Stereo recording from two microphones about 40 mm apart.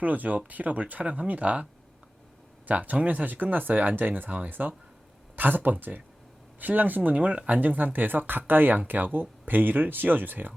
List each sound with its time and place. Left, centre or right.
0.0 s speech: right
2.6 s speech: right
7.6 s speech: right